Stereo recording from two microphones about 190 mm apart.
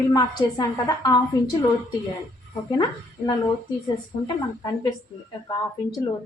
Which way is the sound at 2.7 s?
20° left (ahead or behind).